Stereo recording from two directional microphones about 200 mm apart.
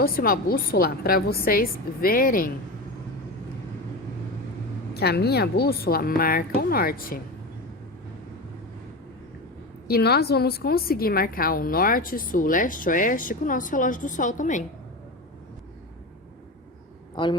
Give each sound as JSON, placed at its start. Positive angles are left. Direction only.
{"t": 0.0, "sound": "a woman's voice", "side_deg": 45}
{"t": 4.9, "sound": "a woman's voice", "side_deg": 55}
{"t": 9.8, "sound": "a woman's voice", "side_deg": 50}